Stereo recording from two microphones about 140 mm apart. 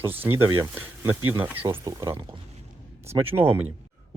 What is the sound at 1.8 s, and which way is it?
Speech, 25° right (ahead or behind).